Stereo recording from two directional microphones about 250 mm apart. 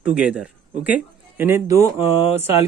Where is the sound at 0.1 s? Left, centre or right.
Centre.